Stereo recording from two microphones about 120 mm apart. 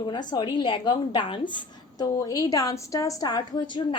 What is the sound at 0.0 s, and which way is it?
A woman's voice, 40° left (ahead or behind).